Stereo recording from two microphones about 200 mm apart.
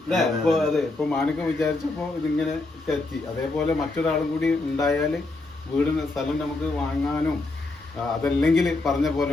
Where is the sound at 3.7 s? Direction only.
5° left (ahead or behind).